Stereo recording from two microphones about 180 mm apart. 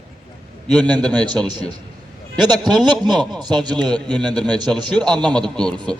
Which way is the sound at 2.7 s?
25° right (ahead or behind).